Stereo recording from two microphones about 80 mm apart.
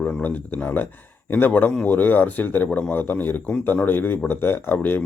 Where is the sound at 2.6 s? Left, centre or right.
Centre.